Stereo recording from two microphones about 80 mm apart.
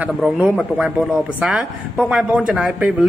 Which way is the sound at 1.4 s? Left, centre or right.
Centre.